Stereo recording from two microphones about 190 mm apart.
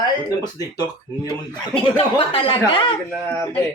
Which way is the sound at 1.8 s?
30° left (ahead or behind).